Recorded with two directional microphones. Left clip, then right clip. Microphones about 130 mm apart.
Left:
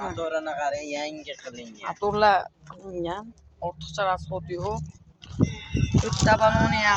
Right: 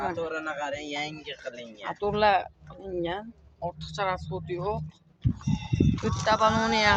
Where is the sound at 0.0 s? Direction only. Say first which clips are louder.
Left 2 dB; 25° right (ahead or behind).